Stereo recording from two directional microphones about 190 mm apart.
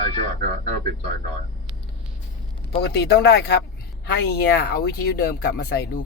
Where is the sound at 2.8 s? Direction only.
60° left (ahead or behind).